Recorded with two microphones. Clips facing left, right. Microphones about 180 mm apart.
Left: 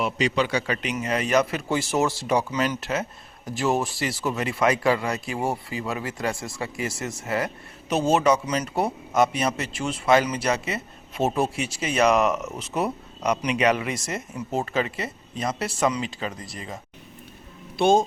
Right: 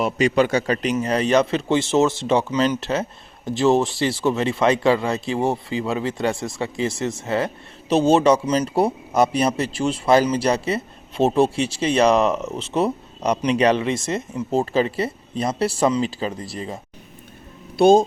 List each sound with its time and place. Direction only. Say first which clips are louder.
0.0 s speech: right 5 dB; 50° right (ahead or behind)